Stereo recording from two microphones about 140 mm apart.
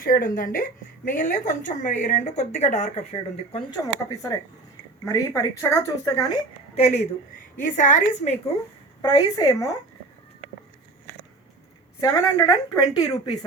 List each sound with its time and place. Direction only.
0.0 s a woman's voice: 80° left; by 3.6 s 55° left (ahead or behind)
3.7 s speech: 25° left (ahead or behind)
6.7 s a woman's voice: 50° left (ahead or behind)
9.0 s speech: 30° left (ahead or behind)
11.9 s speech: 25° left (ahead or behind)